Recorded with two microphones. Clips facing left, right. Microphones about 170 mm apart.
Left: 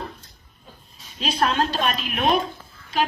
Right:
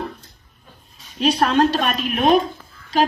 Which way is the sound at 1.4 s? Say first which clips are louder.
Right 3 dB; 45° right (ahead or behind).